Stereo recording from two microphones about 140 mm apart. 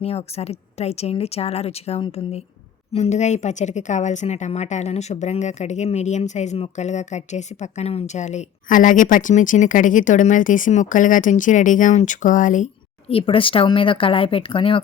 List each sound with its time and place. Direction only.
0.0 s a woman's voice: 45° left (ahead or behind); by 12.6 s 65° left (ahead or behind)
13.1 s speech: 40° left (ahead or behind)